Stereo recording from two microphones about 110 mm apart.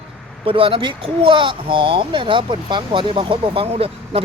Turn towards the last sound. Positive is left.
turn(degrees=-65)  # may be behind; listen again after turning